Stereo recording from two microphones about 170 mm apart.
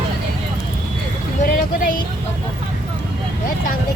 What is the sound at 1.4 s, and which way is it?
Speech, 55° left (ahead or behind).